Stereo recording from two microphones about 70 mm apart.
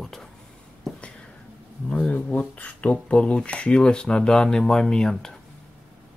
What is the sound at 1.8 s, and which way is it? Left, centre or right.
Speech, left.